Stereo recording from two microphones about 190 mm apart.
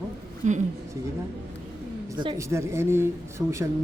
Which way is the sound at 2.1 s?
20° right (ahead or behind).